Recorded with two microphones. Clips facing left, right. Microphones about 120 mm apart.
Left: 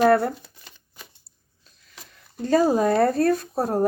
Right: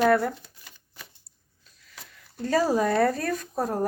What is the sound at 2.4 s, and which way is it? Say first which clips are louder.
Speech: left 4 dB; 25° left (ahead or behind).